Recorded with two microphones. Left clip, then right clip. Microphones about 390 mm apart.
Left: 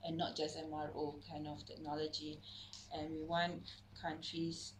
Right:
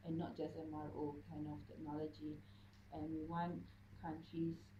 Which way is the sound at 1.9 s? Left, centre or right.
Left.